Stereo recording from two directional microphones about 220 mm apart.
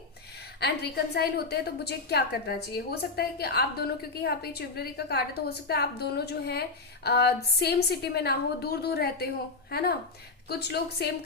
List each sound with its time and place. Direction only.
0.6 s a woman's voice: 50° left (ahead or behind)